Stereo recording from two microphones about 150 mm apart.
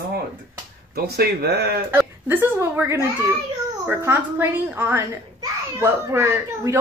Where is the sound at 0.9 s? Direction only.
90° right.